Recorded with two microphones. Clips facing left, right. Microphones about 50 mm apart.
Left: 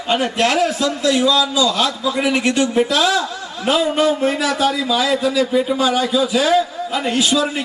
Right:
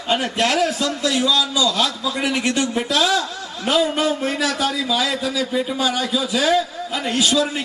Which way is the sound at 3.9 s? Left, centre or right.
Centre.